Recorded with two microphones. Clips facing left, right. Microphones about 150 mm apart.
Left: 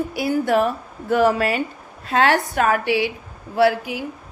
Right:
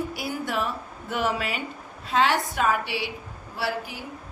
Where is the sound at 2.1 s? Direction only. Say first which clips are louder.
Left 5 dB; 60° left (ahead or behind).